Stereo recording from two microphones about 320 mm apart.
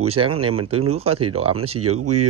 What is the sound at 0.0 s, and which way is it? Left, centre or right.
Speech, centre.